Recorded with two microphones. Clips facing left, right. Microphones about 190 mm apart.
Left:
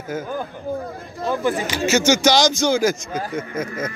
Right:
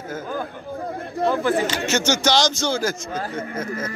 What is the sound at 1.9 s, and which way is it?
A man's voice, 10° left (ahead or behind).